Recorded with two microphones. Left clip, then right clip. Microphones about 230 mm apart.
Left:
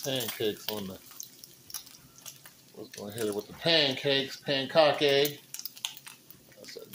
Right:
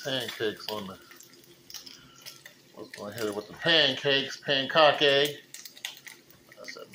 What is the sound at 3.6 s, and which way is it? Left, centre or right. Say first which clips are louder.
Speech: right 3 dB; centre.